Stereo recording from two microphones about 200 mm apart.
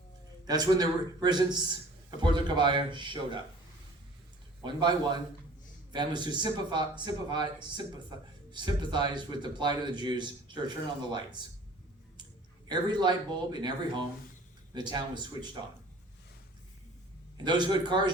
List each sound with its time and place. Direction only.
0.4 s a man's voice: 20° right (ahead or behind)
4.6 s a man's voice: 20° right (ahead or behind)
12.6 s a man's voice: 20° right (ahead or behind)
17.3 s a man's voice: 20° right (ahead or behind)